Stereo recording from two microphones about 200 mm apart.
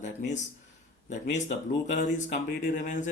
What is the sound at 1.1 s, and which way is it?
Speech, 35° left (ahead or behind).